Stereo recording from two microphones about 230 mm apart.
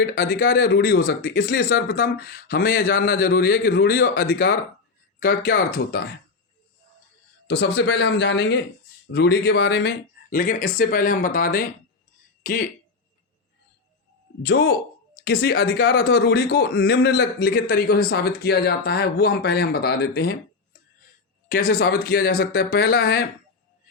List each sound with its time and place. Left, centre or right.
0.0 s speech: left
7.4 s speech: left
14.4 s speech: left
21.5 s speech: left